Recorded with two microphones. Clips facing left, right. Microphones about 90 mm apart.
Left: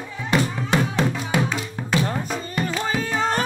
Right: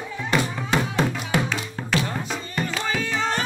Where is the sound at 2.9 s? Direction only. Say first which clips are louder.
Left 2 dB; 40° left (ahead or behind).